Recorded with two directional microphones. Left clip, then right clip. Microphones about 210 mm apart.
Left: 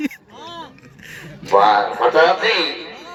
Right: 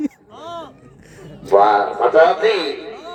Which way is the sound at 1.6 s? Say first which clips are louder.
Even; 50° right (ahead or behind).